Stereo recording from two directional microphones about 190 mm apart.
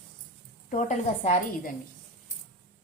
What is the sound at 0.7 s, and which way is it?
A woman's voice, 40° left (ahead or behind).